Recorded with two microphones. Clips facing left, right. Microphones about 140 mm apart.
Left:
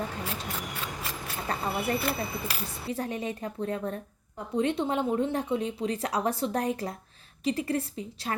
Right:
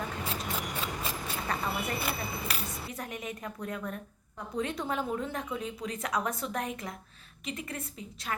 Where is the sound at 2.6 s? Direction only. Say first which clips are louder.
Left 6 dB; 30° left (ahead or behind).